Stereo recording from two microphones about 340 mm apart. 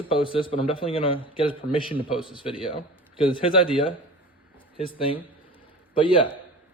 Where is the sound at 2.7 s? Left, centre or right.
Centre.